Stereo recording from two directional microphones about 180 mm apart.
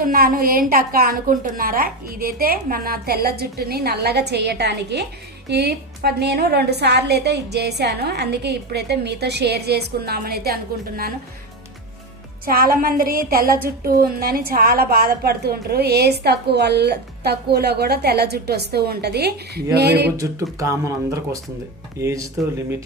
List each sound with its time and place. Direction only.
0.0 s a woman's voice: 55° right (ahead or behind)
12.5 s a woman's voice: 55° right (ahead or behind)
20.1 s speech: 15° right (ahead or behind)